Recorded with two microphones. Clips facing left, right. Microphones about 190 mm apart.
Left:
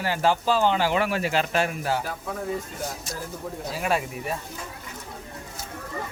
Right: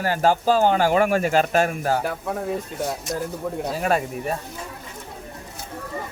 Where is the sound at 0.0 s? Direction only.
45° right (ahead or behind).